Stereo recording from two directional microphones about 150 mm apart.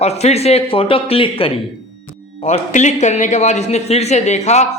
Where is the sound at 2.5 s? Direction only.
50° left (ahead or behind).